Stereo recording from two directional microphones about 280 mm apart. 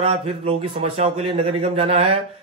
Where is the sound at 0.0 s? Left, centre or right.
Right.